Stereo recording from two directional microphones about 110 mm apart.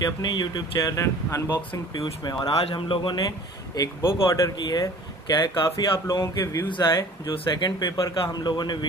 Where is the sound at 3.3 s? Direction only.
35° left (ahead or behind).